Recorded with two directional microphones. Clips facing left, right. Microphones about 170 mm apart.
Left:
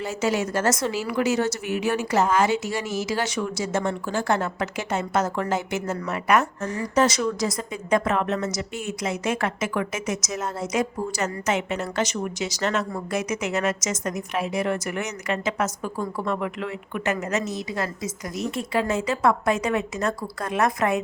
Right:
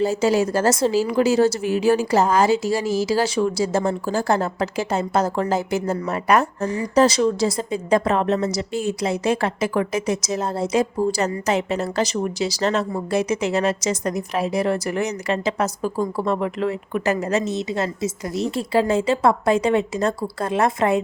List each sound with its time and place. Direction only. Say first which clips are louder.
0.0 s speech: right 6 dB; 30° right (ahead or behind)